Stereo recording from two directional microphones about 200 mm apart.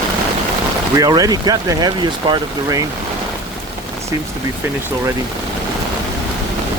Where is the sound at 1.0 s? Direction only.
20° right (ahead or behind).